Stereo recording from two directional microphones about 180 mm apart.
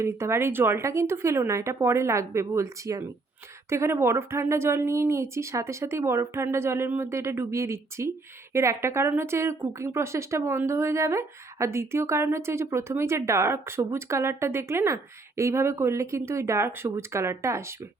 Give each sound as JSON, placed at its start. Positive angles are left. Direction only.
{"t": 0.0, "sound": "a woman's voice", "side_deg": -15}